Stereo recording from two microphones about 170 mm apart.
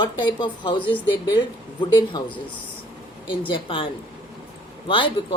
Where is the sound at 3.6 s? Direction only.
30° left (ahead or behind).